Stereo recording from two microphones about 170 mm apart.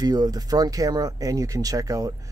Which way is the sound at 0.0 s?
25° right (ahead or behind).